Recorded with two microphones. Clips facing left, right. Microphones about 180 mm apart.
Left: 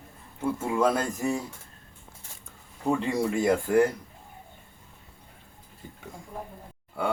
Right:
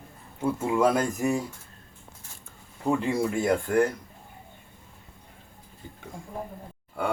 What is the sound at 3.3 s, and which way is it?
Speech, centre (ahead or behind).